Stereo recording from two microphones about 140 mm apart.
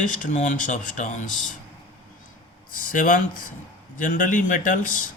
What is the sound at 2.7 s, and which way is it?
Speech, 75° left (ahead or behind).